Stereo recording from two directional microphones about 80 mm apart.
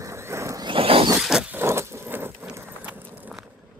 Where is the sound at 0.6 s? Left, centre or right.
Right.